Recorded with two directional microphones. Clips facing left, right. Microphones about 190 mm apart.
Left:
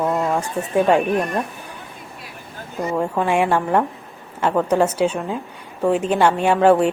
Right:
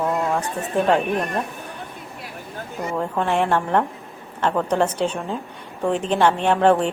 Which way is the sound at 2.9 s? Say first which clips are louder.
Left 2 dB; 5° left (ahead or behind).